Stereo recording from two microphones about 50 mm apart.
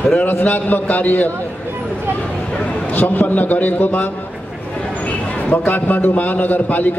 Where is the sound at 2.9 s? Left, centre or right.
Left.